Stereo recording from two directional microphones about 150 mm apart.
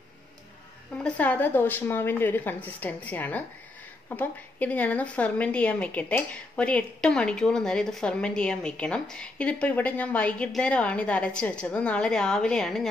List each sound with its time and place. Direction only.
1.0 s a woman's voice: 10° left (ahead or behind)